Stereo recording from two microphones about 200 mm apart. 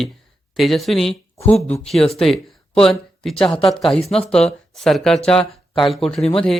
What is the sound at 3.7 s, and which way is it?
Speech, centre (ahead or behind).